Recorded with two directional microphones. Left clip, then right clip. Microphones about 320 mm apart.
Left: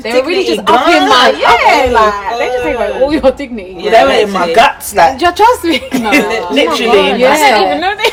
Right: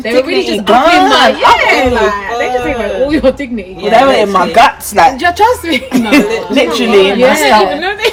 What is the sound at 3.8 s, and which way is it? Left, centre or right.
Speech, centre.